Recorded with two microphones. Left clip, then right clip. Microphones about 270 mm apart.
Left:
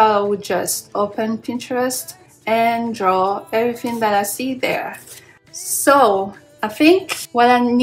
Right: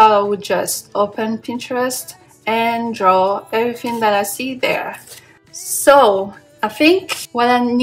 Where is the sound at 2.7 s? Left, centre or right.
Centre.